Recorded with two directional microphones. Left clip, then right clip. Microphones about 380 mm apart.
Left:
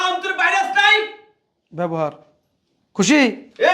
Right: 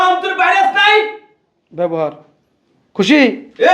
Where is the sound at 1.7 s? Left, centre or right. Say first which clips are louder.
Right 5 dB; left.